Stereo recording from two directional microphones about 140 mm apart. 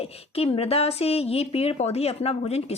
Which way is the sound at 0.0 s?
45° left (ahead or behind).